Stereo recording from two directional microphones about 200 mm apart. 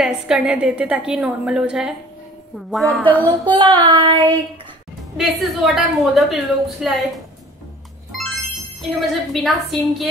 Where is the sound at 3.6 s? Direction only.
25° right (ahead or behind).